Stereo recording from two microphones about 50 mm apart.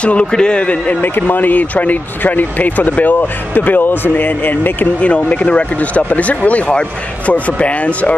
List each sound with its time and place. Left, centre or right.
0.0 s speech: left
1.0 s speech: left
5.0 s speech: left